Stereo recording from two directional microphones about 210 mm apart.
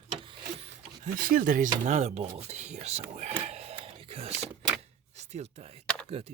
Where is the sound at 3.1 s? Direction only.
30° right (ahead or behind).